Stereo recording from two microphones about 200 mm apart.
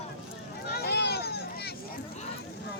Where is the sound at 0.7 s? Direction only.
50° left (ahead or behind).